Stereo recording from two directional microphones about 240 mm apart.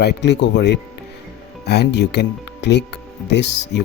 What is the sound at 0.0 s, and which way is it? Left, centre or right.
Speech, left.